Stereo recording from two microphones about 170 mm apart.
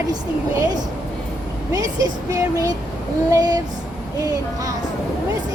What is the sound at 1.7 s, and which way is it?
Speech, 20° right (ahead or behind).